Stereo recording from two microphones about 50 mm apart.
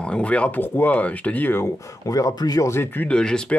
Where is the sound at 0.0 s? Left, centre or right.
Left.